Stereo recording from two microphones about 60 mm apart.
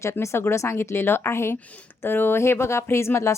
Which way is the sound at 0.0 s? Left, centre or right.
Left.